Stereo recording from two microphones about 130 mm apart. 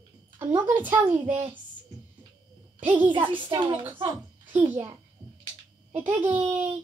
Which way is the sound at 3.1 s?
40° right (ahead or behind).